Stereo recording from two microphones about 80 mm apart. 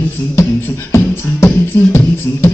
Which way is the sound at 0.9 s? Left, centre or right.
Left.